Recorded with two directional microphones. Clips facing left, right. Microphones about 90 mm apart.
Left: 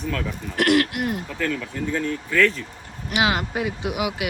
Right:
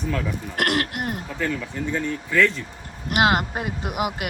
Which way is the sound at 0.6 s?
45° right (ahead or behind).